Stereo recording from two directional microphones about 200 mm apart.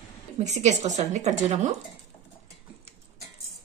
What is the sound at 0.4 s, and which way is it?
Speech, 35° right (ahead or behind).